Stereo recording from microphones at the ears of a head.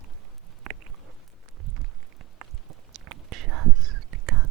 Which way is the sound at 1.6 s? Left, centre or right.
Right.